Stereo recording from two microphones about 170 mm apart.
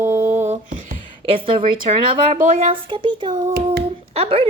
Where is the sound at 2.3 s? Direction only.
50° right (ahead or behind).